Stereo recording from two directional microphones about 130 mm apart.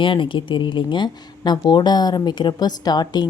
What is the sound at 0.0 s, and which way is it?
Speech, 40° left (ahead or behind).